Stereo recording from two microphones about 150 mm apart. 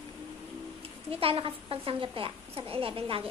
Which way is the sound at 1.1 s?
40° right (ahead or behind).